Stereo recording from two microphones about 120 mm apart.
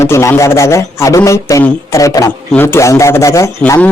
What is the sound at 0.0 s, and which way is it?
A man's voice, 25° left (ahead or behind).